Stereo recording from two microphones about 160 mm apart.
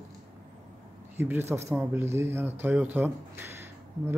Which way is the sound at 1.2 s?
15° right (ahead or behind).